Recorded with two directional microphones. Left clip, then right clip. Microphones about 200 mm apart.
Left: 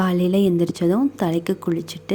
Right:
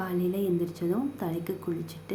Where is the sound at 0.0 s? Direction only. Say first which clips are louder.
Left 10 dB; 45° left (ahead or behind).